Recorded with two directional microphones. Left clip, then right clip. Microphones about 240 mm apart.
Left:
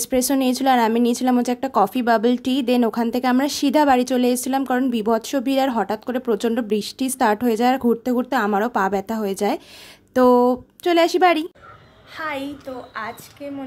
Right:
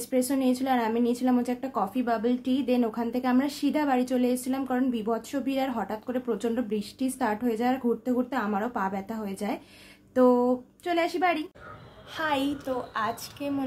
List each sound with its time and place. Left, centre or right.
0.0 s speech: left
12.2 s a woman's voice: centre